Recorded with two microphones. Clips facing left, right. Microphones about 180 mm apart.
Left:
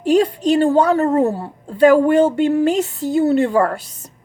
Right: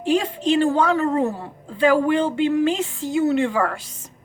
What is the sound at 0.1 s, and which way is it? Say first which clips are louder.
A woman's voice: left 5 dB; 40° left (ahead or behind).